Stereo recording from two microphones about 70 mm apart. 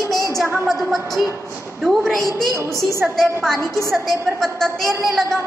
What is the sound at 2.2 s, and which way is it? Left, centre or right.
Speech, left.